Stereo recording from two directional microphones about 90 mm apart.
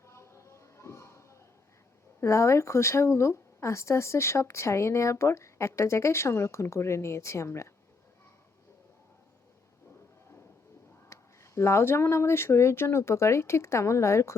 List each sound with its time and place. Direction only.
0.0 s a sound: 30° left (ahead or behind)
2.2 s speech: 35° left (ahead or behind)
11.1 s speech: 30° left (ahead or behind)